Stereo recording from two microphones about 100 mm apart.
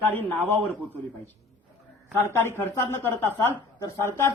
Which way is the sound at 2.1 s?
25° left (ahead or behind).